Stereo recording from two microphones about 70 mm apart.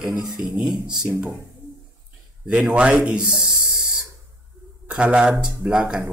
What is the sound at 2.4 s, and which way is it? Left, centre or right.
Speech, centre.